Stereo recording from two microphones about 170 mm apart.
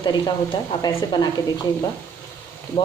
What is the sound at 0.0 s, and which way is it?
Speech, 25° left (ahead or behind).